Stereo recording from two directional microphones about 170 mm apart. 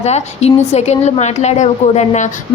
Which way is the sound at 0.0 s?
40° left (ahead or behind).